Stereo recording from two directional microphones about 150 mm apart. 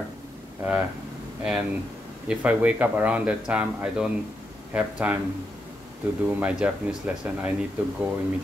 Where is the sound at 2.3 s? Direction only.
10° right (ahead or behind).